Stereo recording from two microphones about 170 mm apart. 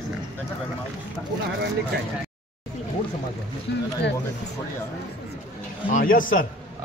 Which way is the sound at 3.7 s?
90° left.